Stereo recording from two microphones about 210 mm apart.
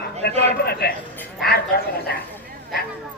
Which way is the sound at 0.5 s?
50° left (ahead or behind).